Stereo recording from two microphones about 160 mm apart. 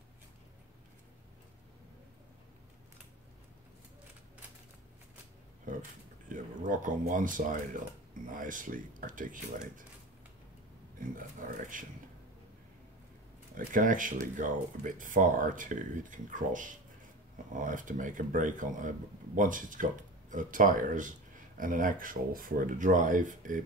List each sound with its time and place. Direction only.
6.2 s speech: 55° right (ahead or behind)
11.1 s speech: 60° right (ahead or behind)
13.6 s speech: 55° right (ahead or behind)